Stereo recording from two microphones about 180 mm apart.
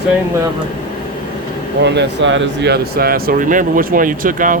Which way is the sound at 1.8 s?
85° right.